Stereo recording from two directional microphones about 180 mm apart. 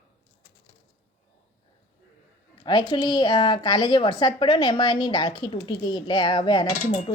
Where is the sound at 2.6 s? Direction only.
25° left (ahead or behind).